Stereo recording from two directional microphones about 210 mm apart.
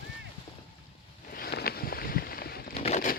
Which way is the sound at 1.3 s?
45° left (ahead or behind).